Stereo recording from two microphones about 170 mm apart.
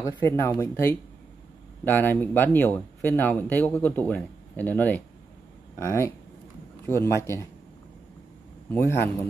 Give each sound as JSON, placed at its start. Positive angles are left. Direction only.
{"t": 0.2, "sound": "speech", "side_deg": 15}
{"t": 8.6, "sound": "speech", "side_deg": 15}